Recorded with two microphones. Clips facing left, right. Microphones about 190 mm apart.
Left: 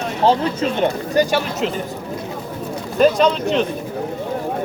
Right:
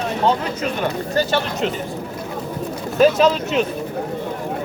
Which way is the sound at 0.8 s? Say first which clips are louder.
Left 4 dB; 15° left (ahead or behind).